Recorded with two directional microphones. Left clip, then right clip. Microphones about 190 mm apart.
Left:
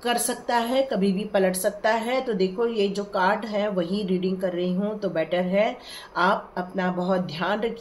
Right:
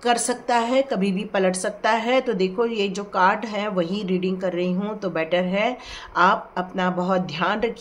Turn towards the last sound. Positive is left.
turn(degrees=-30)  # may be behind; listen again after turning